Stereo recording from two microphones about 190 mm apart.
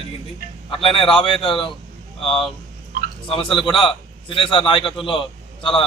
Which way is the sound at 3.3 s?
25° left (ahead or behind).